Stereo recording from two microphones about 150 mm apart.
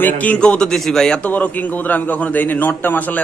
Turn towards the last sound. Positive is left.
turn(degrees=10)  # may be behind; listen again after turning